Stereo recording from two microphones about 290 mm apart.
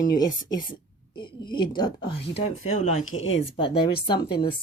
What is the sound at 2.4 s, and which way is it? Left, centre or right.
Speech, left.